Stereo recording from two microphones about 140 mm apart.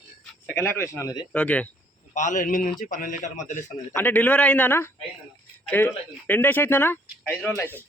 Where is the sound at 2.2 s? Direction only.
65° left (ahead or behind).